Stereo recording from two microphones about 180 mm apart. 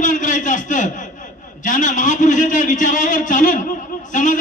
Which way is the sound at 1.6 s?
45° left (ahead or behind).